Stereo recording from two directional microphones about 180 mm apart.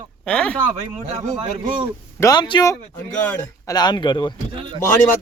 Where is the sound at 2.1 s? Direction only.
20° left (ahead or behind).